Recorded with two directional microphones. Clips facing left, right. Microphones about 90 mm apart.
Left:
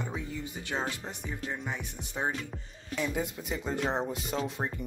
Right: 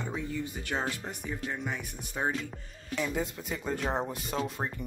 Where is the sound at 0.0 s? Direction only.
15° left (ahead or behind).